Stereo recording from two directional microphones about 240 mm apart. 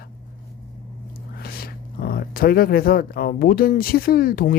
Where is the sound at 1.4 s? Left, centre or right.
Left.